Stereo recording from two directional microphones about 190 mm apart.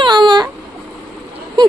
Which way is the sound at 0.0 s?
25° right (ahead or behind).